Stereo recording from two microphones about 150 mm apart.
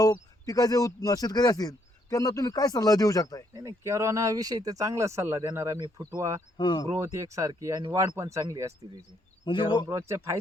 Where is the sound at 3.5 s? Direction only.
25° right (ahead or behind).